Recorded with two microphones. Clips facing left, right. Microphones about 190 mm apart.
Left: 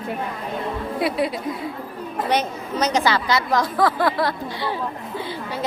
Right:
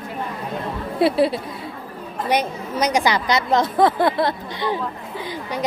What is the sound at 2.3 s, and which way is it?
A woman's voice, 10° right (ahead or behind).